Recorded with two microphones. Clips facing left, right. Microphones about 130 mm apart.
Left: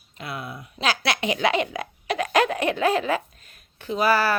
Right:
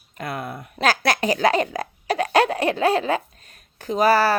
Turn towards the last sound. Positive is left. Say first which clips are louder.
# right 4 dB
turn(degrees=-40)  # may be behind; listen again after turning